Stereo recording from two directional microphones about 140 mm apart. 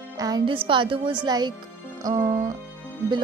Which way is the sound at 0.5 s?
35° right (ahead or behind).